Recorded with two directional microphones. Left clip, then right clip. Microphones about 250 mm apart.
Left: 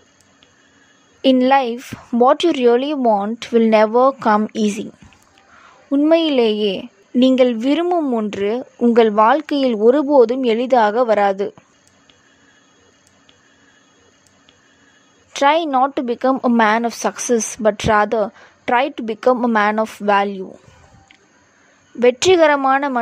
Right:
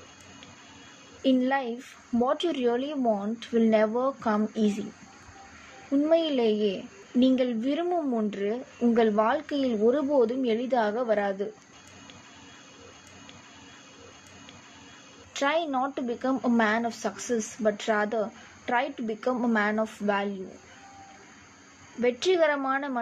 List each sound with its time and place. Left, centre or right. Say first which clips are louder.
1.2 s a woman's voice: left 12 dB; left
6.0 s a woman's voice: left 10 dB; left
15.3 s a woman's voice: left 12 dB; left
22.0 s a woman's voice: left 12 dB; left